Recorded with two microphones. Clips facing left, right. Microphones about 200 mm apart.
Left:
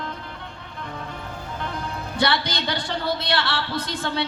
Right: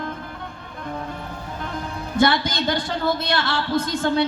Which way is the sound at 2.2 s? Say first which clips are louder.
Right 5 dB; 45° right (ahead or behind).